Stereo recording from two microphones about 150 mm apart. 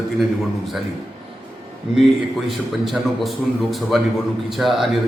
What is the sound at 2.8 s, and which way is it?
A man's voice, centre (ahead or behind).